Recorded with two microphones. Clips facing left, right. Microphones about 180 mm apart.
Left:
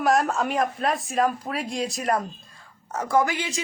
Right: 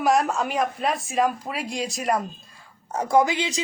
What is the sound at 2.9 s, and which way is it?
Speech, 15° right (ahead or behind).